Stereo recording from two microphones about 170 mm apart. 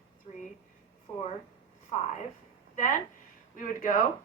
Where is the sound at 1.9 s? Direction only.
40° left (ahead or behind).